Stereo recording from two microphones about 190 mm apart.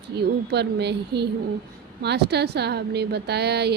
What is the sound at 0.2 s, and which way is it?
A woman's voice, 60° right (ahead or behind).